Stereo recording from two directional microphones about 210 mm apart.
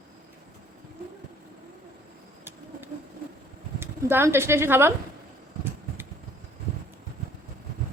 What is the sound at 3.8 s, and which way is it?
Speech, 10° right (ahead or behind).